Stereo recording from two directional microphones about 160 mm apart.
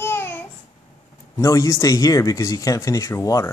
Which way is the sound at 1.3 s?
20° left (ahead or behind).